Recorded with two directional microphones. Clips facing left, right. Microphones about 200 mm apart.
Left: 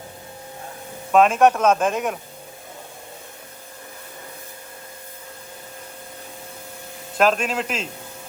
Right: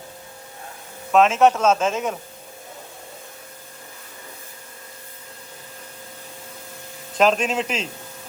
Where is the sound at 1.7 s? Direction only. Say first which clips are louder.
Left 1 dB; centre (ahead or behind).